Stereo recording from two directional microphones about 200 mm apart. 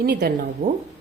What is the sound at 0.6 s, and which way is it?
Speech, 30° right (ahead or behind).